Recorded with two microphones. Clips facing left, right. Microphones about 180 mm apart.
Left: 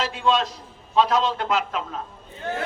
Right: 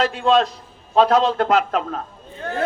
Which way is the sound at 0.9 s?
50° right (ahead or behind).